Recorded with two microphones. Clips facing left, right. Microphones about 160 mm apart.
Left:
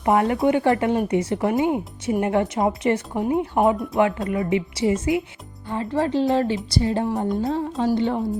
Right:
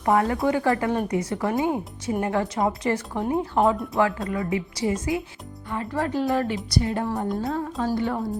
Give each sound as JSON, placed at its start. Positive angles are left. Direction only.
{"t": 0.0, "sound": "speech", "side_deg": 20}